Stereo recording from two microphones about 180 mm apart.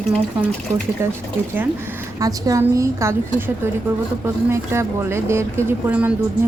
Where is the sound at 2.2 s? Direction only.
20° right (ahead or behind).